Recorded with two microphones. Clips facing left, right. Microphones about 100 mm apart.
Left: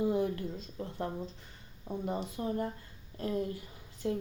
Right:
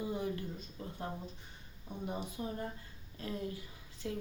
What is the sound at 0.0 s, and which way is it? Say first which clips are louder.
Speech: left 7 dB; 65° left (ahead or behind).